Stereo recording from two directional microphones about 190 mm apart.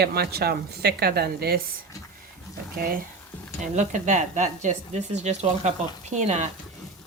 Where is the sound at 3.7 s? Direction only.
40° right (ahead or behind).